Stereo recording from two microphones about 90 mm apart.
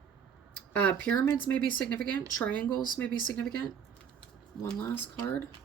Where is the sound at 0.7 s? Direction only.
20° left (ahead or behind).